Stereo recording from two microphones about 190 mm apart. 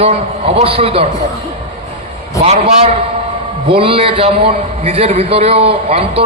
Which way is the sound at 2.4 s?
35° right (ahead or behind).